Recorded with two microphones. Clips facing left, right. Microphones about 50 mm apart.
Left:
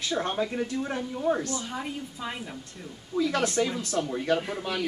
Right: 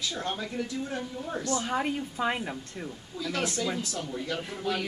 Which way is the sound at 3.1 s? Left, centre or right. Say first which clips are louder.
Left 6 dB; left.